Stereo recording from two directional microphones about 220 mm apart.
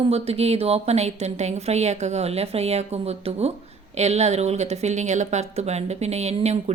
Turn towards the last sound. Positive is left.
turn(degrees=-30)  # may be behind; listen again after turning